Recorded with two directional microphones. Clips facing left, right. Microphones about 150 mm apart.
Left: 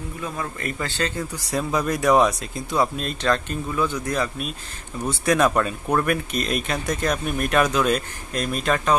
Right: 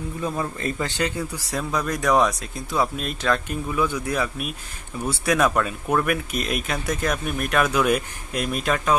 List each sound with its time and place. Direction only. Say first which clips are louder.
0.2 s speech: right 3 dB; 25° right (ahead or behind)
1.5 s speech: left 3 dB; 5° left (ahead or behind)